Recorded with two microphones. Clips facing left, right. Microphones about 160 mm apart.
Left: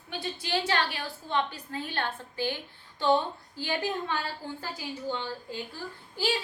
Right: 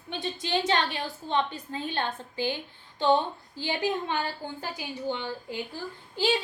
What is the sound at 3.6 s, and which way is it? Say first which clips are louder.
A woman's voice: right 2 dB; 20° right (ahead or behind).